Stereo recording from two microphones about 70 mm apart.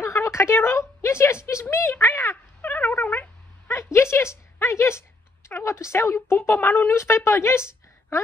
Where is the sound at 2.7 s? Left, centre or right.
Left.